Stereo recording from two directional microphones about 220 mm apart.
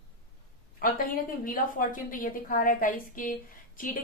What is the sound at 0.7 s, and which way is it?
A woman's voice, 40° left (ahead or behind).